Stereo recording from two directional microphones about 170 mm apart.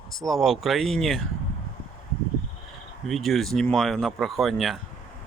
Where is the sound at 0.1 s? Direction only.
Centre (ahead or behind).